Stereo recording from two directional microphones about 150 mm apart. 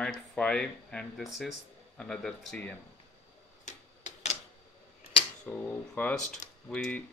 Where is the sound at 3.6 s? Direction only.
50° left (ahead or behind).